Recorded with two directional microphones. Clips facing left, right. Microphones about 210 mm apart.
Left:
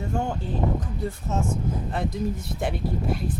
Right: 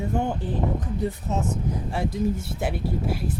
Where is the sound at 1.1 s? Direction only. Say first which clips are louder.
Left 2 dB; 20° right (ahead or behind).